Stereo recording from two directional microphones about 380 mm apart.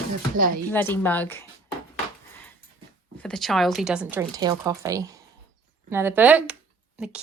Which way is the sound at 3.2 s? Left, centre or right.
Centre.